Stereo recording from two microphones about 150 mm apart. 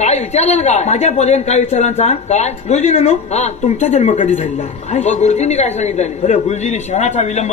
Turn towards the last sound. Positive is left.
turn(degrees=50)  # may be behind; listen again after turning